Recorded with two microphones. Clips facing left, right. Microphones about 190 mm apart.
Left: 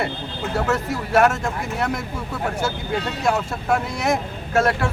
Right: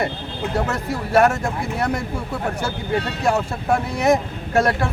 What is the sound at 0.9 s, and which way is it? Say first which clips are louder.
Speech: right 3 dB; 35° right (ahead or behind).